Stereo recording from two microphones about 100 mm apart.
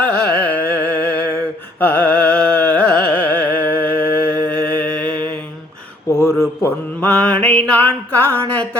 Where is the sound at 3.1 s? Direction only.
20° left (ahead or behind).